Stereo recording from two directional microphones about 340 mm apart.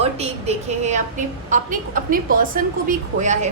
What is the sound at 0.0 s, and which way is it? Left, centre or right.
A woman's voice, centre.